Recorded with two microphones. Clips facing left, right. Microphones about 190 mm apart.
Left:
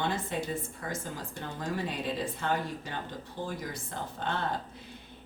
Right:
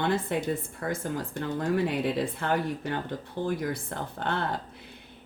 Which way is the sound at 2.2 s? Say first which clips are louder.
Right 4 dB; 55° right (ahead or behind).